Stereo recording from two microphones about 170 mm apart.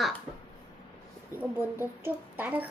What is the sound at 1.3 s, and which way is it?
Speech, 20° left (ahead or behind).